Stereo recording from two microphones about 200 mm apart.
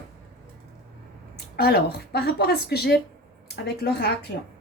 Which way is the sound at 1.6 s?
50° left (ahead or behind).